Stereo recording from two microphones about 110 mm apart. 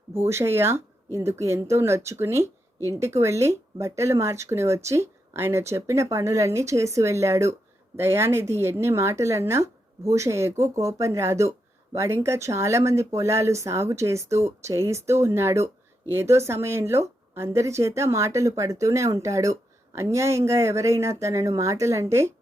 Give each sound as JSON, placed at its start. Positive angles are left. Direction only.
{"t": 0.1, "sound": "speech", "side_deg": -25}